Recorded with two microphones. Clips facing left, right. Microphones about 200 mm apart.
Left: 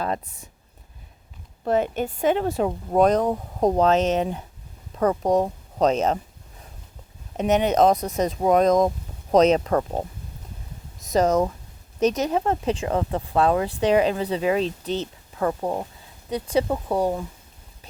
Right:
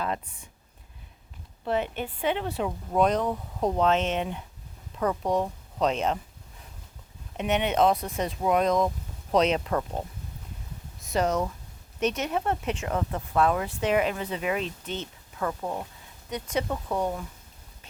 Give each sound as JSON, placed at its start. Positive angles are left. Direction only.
{"t": 0.0, "sound": "speech", "side_deg": 40}
{"t": 1.6, "sound": "speech", "side_deg": 45}
{"t": 7.3, "sound": "speech", "side_deg": 40}